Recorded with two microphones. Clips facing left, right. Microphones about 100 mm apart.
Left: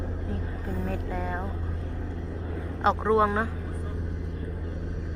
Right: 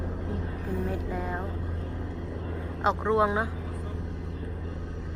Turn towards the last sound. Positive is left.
turn(degrees=-5)  # may be behind; listen again after turning